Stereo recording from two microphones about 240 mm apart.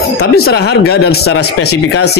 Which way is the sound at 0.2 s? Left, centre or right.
Left.